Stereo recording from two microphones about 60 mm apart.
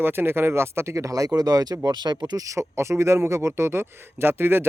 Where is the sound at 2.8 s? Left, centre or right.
Right.